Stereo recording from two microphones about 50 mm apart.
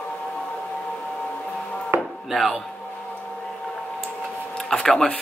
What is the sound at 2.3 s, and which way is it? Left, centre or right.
Speech, centre.